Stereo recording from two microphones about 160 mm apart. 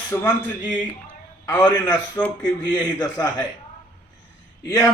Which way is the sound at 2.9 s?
25° left (ahead or behind).